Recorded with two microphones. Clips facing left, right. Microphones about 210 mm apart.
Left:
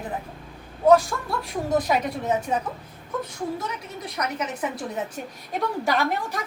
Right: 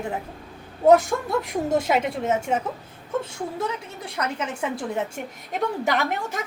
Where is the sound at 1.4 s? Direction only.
25° right (ahead or behind).